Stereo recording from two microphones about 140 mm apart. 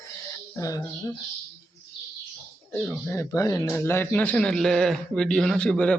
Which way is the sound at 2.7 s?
15° left (ahead or behind).